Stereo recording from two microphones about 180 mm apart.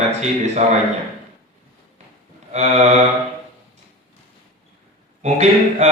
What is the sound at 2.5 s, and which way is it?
Speech, 40° right (ahead or behind).